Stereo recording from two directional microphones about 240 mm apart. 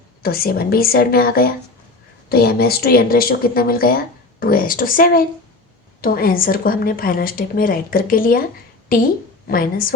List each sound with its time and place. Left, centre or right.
0.2 s speech: left